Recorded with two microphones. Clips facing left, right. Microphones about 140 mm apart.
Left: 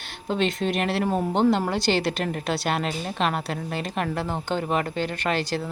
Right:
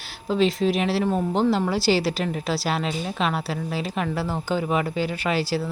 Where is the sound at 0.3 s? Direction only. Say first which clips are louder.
Right 3 dB; centre (ahead or behind).